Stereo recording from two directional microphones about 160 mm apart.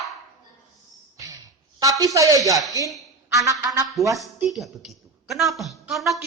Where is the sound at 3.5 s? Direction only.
20° right (ahead or behind).